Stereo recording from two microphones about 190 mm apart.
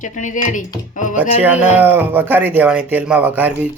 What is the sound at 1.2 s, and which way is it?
Speech, 10° right (ahead or behind).